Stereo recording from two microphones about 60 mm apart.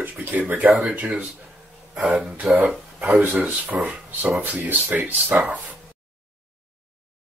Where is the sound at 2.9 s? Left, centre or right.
Centre.